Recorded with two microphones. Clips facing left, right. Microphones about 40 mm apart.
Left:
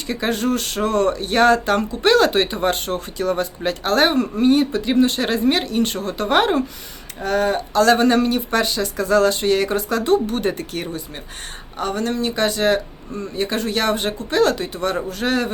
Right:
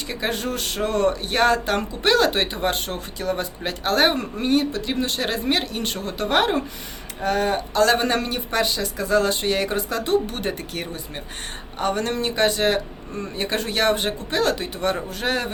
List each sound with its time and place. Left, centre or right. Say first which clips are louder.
0.1 s speech: left 6 dB; centre
7.2 s speech: left 2 dB; centre
11.9 s speech: left 2 dB; right
12.4 s speech: left 1 dB; centre
14.5 s speech: left 2 dB; centre